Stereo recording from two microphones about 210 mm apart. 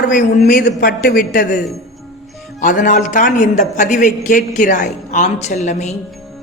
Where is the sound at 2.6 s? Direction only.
40° left (ahead or behind).